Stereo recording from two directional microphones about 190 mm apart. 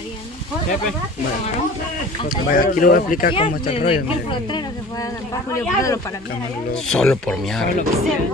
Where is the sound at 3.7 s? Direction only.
30° left (ahead or behind); by 6.2 s 15° left (ahead or behind).